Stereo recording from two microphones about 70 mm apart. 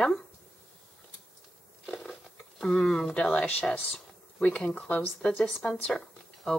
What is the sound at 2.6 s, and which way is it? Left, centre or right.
Speech, centre.